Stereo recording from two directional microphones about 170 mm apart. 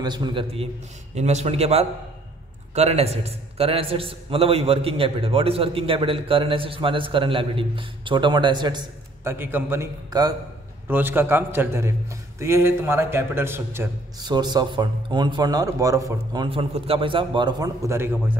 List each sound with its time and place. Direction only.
0.0 s a man's voice: 25° right (ahead or behind)
9.2 s a man's voice: 15° right (ahead or behind)
14.2 s speech: 25° right (ahead or behind)
16.4 s speech: 35° right (ahead or behind); by 18.4 s 10° right (ahead or behind)